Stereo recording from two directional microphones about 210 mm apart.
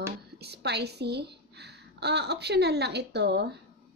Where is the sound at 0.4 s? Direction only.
50° right (ahead or behind).